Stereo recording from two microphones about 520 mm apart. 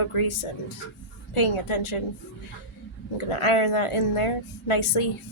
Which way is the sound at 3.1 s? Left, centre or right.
Left.